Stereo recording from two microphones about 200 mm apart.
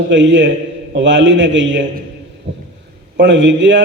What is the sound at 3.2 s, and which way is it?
Speech, 65° right (ahead or behind).